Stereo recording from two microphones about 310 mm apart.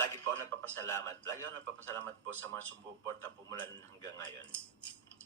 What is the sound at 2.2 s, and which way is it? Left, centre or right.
Speech, right.